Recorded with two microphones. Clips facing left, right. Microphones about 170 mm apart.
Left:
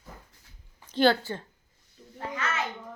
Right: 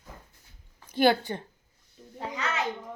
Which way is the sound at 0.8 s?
10° right (ahead or behind).